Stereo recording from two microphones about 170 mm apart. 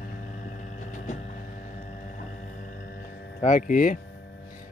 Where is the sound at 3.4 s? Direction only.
50° left (ahead or behind).